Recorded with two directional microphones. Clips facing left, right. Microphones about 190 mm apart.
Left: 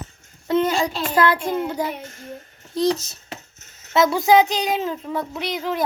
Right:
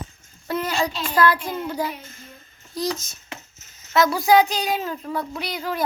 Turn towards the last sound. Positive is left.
turn(degrees=20)  # may be behind; listen again after turning